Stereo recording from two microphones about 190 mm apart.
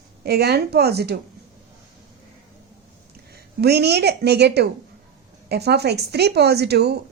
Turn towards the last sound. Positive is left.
turn(degrees=-60)  # may be behind; listen again after turning